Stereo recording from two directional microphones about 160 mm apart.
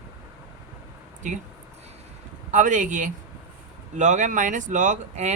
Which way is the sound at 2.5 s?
50° right (ahead or behind).